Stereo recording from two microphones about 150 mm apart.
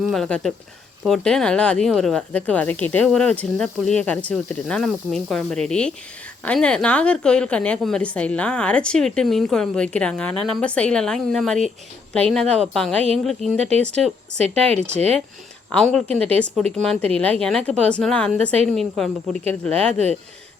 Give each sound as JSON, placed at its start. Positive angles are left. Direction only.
{"t": 0.0, "sound": "a woman's voice", "side_deg": 0}
{"t": 13.6, "sound": "speech", "side_deg": -45}
{"t": 13.8, "sound": "speech", "side_deg": 5}
{"t": 14.3, "sound": "speech", "side_deg": -45}
{"t": 15.7, "sound": "a woman's voice", "side_deg": 5}